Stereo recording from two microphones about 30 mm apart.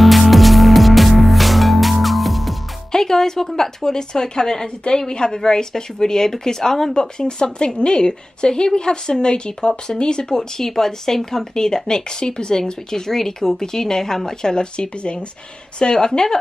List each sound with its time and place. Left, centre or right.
0.0 s music: centre
2.9 s a woman's voice: centre
10.6 s a woman's voice: centre